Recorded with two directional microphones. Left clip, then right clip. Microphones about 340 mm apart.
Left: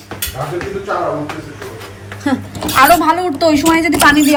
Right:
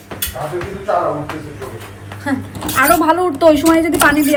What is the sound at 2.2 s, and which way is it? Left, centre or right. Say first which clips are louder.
Speech: left 3 dB; centre.